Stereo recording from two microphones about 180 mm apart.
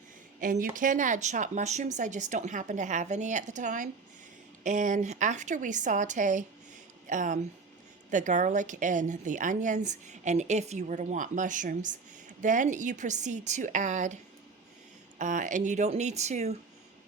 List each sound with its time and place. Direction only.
0.3 s a woman's voice: 50° right (ahead or behind)
15.2 s speech: 45° right (ahead or behind)